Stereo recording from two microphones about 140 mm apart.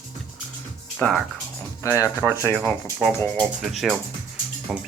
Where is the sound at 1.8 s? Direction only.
20° left (ahead or behind).